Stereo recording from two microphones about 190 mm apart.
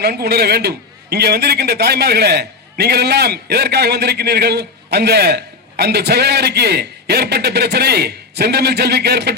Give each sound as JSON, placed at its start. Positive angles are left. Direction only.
{"t": 0.0, "sound": "a man's voice", "side_deg": -60}